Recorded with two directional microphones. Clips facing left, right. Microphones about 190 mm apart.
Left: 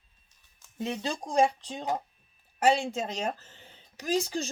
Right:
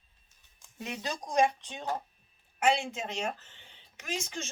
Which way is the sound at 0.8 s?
30° left (ahead or behind).